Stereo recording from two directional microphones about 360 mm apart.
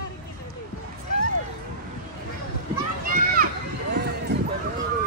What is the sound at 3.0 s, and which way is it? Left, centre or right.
Children playing, right.